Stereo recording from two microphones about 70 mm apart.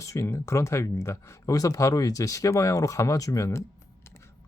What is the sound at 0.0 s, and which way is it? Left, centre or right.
Speech, left.